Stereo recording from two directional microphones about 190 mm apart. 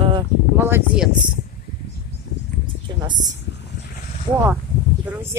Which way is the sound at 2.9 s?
20° right (ahead or behind).